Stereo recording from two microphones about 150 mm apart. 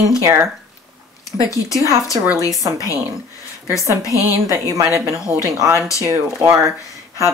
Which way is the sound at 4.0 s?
20° left (ahead or behind).